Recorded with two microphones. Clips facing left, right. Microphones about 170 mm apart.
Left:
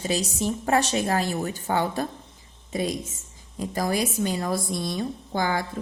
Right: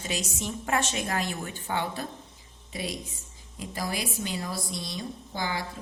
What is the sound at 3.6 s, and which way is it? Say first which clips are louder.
A woman's voice: left 7 dB; 45° left (ahead or behind).